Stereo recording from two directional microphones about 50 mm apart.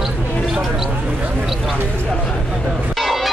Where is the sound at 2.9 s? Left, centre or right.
Centre.